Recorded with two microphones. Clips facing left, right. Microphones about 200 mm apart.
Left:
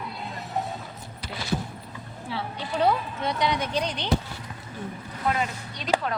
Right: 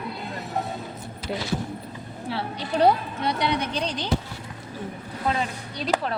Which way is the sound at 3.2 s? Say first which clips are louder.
Right 2 dB; 65° right (ahead or behind).